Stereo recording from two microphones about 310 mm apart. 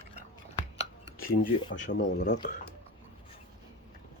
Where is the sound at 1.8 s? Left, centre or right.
Left.